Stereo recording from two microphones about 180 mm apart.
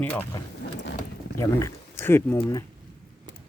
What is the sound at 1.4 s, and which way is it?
Speech, 15° left (ahead or behind).